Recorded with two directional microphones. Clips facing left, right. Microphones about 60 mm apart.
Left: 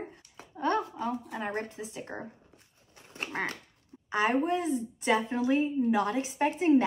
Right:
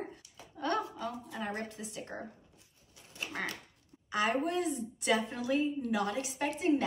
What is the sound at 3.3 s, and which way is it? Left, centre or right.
A woman's voice, left.